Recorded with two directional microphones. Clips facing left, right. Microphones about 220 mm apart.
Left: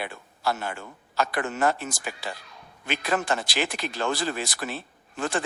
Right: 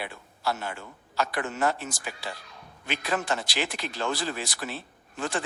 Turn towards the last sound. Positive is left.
turn(degrees=50)  # may be behind; listen again after turning